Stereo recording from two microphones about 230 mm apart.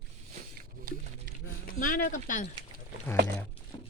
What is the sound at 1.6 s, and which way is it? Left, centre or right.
Speech, left.